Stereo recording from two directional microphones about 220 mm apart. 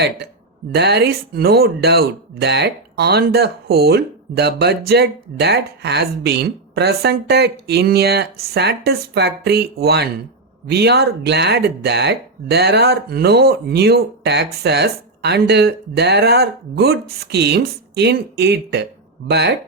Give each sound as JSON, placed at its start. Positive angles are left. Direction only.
{"t": 0.7, "sound": "speech", "side_deg": -50}